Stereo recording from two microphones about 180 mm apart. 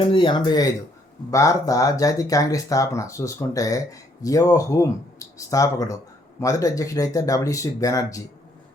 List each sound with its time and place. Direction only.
0.0 s speech: 25° left (ahead or behind)